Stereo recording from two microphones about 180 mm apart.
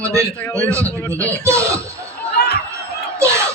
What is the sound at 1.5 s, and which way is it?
Speech, 15° right (ahead or behind).